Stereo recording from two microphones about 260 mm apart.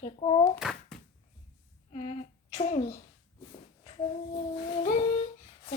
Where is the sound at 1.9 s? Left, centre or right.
Left.